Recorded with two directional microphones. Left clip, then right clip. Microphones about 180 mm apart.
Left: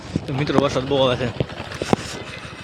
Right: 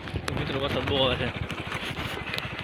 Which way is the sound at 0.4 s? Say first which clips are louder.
Left 10 dB; 40° left (ahead or behind).